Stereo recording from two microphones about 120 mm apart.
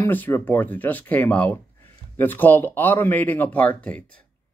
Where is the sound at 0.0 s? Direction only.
20° left (ahead or behind).